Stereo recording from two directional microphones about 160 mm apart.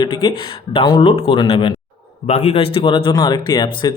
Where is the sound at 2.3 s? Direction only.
45° left (ahead or behind).